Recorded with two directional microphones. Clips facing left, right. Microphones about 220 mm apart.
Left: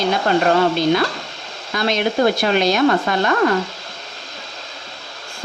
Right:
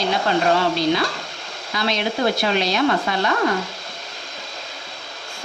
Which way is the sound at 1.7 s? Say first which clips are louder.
Left 4 dB; 50° left (ahead or behind).